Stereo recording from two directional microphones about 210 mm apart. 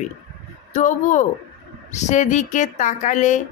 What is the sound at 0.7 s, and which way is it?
Speech, 35° left (ahead or behind).